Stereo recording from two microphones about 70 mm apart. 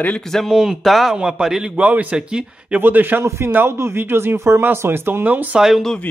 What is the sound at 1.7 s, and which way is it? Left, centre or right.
A man's voice, centre.